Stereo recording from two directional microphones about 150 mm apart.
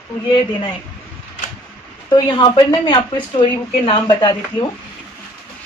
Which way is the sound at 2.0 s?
30° left (ahead or behind).